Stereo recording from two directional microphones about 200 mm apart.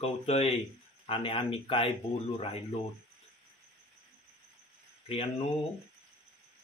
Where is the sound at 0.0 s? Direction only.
30° left (ahead or behind).